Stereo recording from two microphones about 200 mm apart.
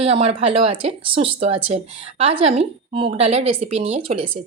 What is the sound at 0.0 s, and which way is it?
Speech, 30° right (ahead or behind).